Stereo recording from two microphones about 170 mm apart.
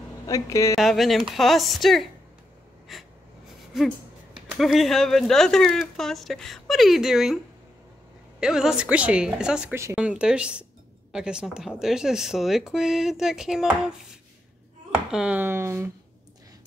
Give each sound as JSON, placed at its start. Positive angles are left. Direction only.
{"t": 0.3, "sound": "a woman's voice", "side_deg": 20}
{"t": 0.7, "sound": "speech", "side_deg": 0}
{"t": 2.9, "sound": "gasp", "side_deg": 0}
{"t": 4.6, "sound": "speech", "side_deg": 0}
{"t": 8.4, "sound": "speech", "side_deg": -5}
{"t": 15.0, "sound": "speech", "side_deg": -5}